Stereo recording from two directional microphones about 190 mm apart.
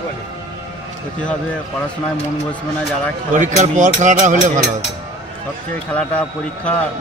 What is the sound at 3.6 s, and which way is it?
Speech, 40° right (ahead or behind).